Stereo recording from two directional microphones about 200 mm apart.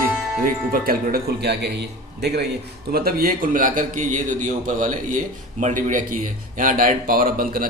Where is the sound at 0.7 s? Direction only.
45° right (ahead or behind).